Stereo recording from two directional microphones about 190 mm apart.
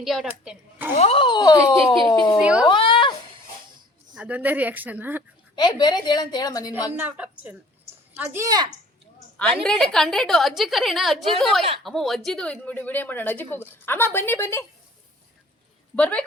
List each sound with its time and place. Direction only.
0.0 s a woman's voice: centre (ahead or behind)
0.9 s a woman's voice: 30° left (ahead or behind)
2.4 s a woman's voice: 5° right (ahead or behind)
2.6 s a sound: 25° left (ahead or behind)
4.1 s speech: 5° right (ahead or behind)
5.5 s a woman's voice: 20° left (ahead or behind)
7.0 s speech: 10° right (ahead or behind)
9.6 s a woman's voice: 5° left (ahead or behind)
16.0 s speech: 5° left (ahead or behind)